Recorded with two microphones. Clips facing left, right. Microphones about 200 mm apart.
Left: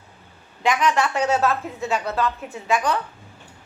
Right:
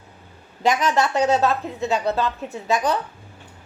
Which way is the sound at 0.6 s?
40° right (ahead or behind).